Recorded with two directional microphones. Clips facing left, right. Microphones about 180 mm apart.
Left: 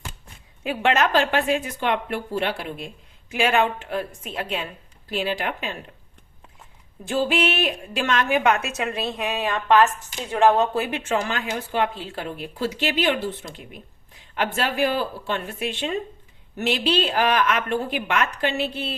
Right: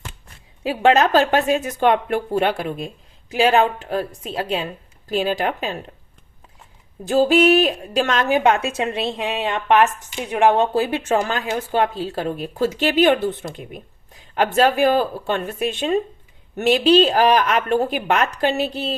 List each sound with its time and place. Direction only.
0.6 s speech: 35° right (ahead or behind)
7.0 s a woman's voice: 40° right (ahead or behind)